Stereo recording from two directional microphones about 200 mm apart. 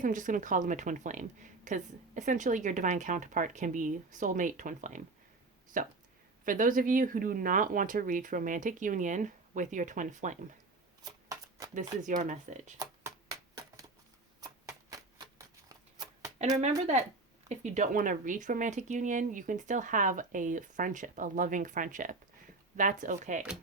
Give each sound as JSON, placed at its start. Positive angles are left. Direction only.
{"t": 0.0, "sound": "speech", "side_deg": -40}
{"t": 11.0, "sound": "shuffling cards", "side_deg": -20}
{"t": 11.7, "sound": "speech", "side_deg": -40}
{"t": 12.8, "sound": "a sound", "side_deg": -15}
{"t": 14.4, "sound": "a sound", "side_deg": -15}
{"t": 16.6, "sound": "speech", "side_deg": -35}